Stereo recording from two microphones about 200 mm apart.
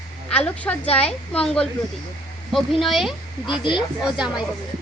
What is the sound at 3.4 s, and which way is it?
Speech, 25° left (ahead or behind).